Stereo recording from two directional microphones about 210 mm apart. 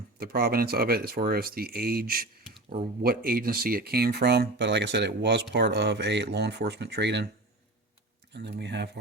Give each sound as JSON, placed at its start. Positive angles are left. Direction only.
{"t": 0.2, "sound": "speech", "side_deg": -45}
{"t": 8.3, "sound": "speech", "side_deg": -55}